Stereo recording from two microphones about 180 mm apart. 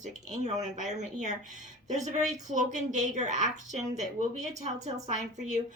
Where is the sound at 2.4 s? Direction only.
45° right (ahead or behind).